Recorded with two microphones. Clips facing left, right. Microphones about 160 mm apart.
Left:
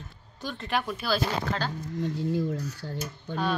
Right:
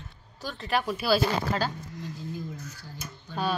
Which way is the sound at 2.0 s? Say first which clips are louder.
Left 10 dB; 70° left (ahead or behind).